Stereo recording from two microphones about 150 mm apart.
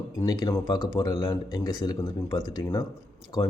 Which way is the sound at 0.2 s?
25° left (ahead or behind).